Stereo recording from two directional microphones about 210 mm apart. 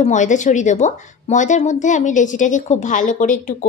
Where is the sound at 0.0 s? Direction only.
35° left (ahead or behind).